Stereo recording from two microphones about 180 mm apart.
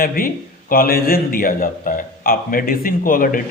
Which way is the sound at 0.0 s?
55° left (ahead or behind).